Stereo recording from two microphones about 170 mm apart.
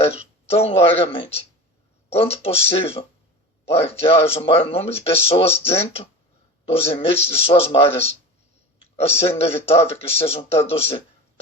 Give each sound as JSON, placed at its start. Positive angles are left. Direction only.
{"t": 0.0, "sound": "speech", "side_deg": 35}
{"t": 9.0, "sound": "speech", "side_deg": 35}